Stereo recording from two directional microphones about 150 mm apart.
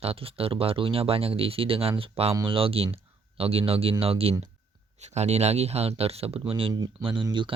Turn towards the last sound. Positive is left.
turn(degrees=-30)  # may be behind; listen again after turning